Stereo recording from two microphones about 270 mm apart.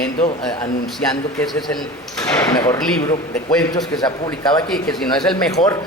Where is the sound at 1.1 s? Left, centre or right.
Centre.